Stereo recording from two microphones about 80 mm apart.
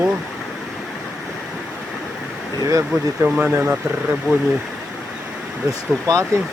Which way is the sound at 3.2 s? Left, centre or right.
Centre.